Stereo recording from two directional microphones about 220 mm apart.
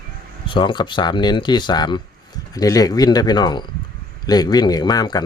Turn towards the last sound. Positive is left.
turn(degrees=20)  # may be behind; listen again after turning